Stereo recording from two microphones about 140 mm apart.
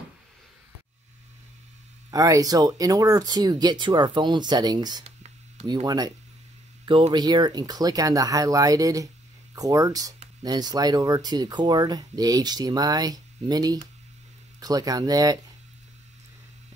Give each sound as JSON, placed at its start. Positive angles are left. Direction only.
{"t": 2.0, "sound": "speech", "side_deg": -25}
{"t": 5.0, "sound": "a sound", "side_deg": -50}
{"t": 5.9, "sound": "speech", "side_deg": -30}